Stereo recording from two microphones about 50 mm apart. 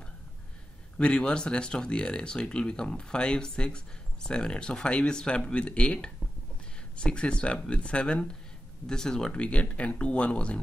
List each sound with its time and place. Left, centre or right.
0.9 s speech: centre